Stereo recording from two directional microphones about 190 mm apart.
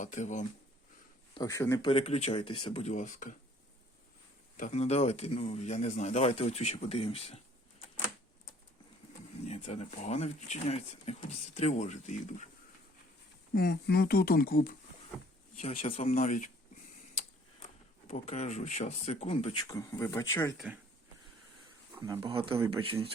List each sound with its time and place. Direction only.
0.0 s speech: 40° left (ahead or behind)
1.3 s speech: 20° left (ahead or behind)
1.9 s speech: 30° left (ahead or behind)
4.5 s speech: 40° left (ahead or behind)
9.5 s speech: 35° left (ahead or behind)
13.5 s speech: 55° left (ahead or behind)
15.6 s speech: 30° left (ahead or behind)
18.1 s speech: 35° left (ahead or behind)
19.6 s speech: 15° left (ahead or behind)
21.9 s speech: 15° right (ahead or behind)
22.3 s speech: 30° right (ahead or behind)